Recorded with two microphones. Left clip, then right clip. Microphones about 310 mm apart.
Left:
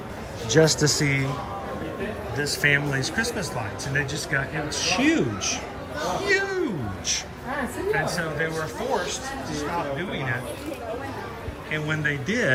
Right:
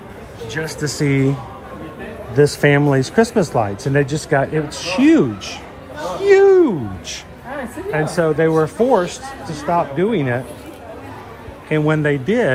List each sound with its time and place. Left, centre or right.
0.5 s speech: centre
0.9 s speech: centre
2.4 s speech: centre
6.1 s a sound: centre
7.9 s speech: centre
11.7 s speech: centre